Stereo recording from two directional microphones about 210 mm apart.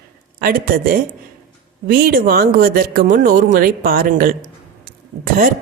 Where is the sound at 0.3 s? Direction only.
45° right (ahead or behind).